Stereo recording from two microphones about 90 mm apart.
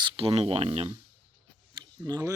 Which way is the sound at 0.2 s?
90° right.